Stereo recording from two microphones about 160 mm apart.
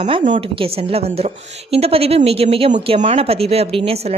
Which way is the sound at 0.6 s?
35° right (ahead or behind).